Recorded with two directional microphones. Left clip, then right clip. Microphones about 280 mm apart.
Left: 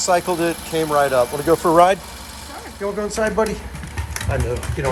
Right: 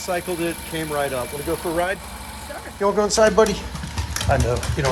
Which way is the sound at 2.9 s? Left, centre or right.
Centre.